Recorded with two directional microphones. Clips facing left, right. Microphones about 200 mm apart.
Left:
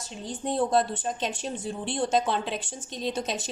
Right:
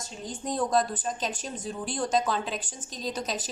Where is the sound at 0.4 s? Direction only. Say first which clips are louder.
Left 2 dB; 30° left (ahead or behind).